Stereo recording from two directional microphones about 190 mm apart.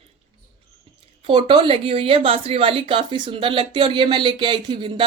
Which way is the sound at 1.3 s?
25° right (ahead or behind).